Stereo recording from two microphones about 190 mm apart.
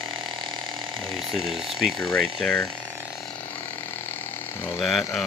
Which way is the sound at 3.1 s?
Centre (ahead or behind).